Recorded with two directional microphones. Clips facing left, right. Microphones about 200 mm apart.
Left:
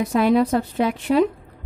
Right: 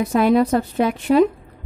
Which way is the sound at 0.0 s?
45° right (ahead or behind).